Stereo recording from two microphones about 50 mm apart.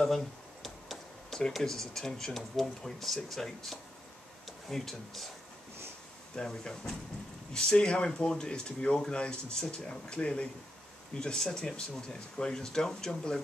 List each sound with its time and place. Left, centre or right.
0.0 s a sound: centre
1.6 s speech: centre
6.3 s speech: centre